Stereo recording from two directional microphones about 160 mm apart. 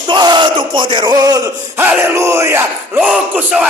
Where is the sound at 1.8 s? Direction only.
10° right (ahead or behind).